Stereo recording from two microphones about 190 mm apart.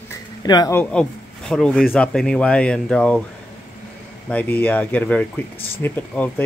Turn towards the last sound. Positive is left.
turn(degrees=10)  # may be behind; listen again after turning